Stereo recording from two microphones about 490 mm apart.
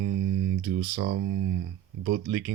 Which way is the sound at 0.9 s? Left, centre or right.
Right.